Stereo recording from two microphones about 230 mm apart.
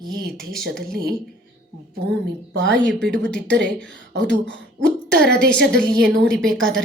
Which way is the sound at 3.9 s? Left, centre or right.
Right.